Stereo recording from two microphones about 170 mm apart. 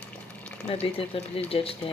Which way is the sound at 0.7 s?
35° left (ahead or behind).